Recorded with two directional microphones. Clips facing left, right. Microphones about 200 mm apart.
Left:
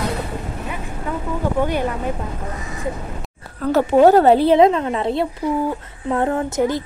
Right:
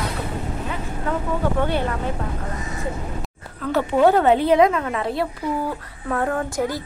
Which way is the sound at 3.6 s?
40° left (ahead or behind).